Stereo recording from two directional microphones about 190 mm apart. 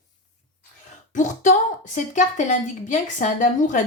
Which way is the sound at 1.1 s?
40° left (ahead or behind).